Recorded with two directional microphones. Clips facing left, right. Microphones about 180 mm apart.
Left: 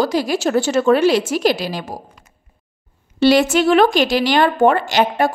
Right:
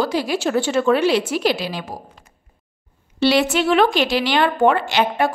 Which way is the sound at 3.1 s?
45° left (ahead or behind).